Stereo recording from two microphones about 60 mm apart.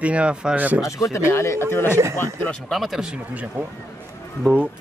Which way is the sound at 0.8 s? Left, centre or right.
Left.